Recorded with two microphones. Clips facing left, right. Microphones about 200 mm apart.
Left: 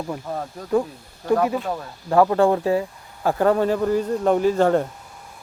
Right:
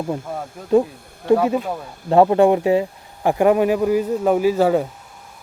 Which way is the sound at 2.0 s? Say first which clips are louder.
Right 3 dB; 25° right (ahead or behind).